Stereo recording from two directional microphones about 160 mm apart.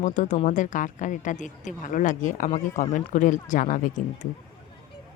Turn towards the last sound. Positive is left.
turn(degrees=50)  # may be behind; listen again after turning